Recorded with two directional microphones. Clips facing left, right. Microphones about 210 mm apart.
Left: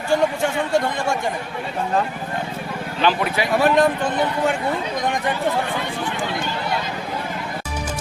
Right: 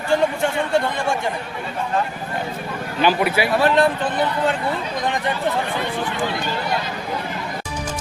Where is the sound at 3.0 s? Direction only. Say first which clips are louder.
Right 2 dB; 10° right (ahead or behind).